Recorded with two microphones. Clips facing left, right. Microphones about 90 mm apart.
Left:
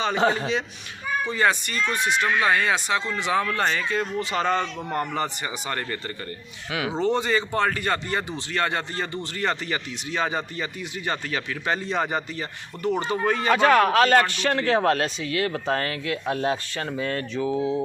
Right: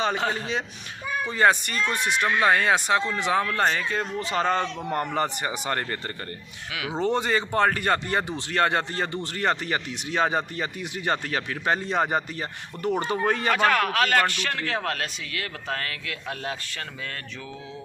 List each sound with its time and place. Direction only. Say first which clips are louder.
0.2 s a man's voice: left 6 dB; 30° left (ahead or behind)
1.3 s speech: right 3 dB; 45° right (ahead or behind)
7.0 s speech: even; 50° right (ahead or behind)
13.5 s a man's voice: left 6 dB; 30° left (ahead or behind)